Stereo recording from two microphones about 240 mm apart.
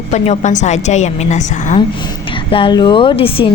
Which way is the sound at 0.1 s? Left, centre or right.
Left.